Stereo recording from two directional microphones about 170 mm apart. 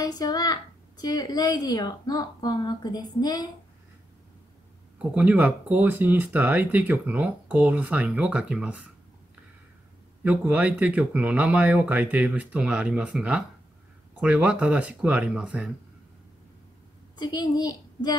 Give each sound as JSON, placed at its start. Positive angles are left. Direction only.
{"t": 0.0, "sound": "a woman's voice", "side_deg": 25}
{"t": 4.9, "sound": "speech", "side_deg": -10}
{"t": 10.2, "sound": "speech", "side_deg": -10}
{"t": 17.2, "sound": "a woman's voice", "side_deg": 25}